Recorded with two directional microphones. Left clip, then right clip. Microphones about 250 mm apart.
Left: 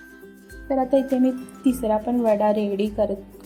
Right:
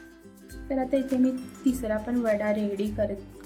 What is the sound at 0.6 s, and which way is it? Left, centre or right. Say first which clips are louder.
A woman's voice: left 7 dB; centre.